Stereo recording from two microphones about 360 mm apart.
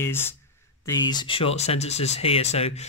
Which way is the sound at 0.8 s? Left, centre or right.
Centre.